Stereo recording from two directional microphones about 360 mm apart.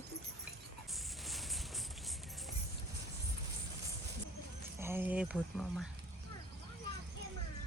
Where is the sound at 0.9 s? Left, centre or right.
Centre.